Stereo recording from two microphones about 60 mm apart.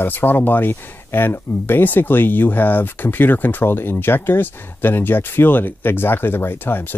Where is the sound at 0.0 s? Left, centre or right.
Left.